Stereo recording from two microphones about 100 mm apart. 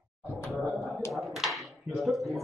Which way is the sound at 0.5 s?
Centre (ahead or behind).